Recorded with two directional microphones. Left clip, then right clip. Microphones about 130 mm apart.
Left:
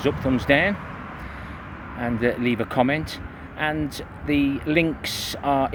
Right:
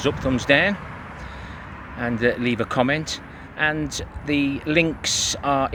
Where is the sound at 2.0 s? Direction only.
15° right (ahead or behind).